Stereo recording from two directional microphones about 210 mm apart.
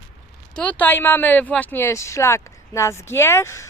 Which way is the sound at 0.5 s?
5° left (ahead or behind).